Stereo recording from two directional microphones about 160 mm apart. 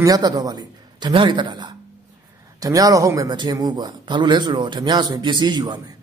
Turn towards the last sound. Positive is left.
turn(degrees=-25)  # may be behind; listen again after turning